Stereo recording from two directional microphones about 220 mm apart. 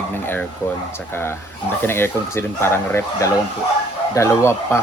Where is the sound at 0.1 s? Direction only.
10° left (ahead or behind).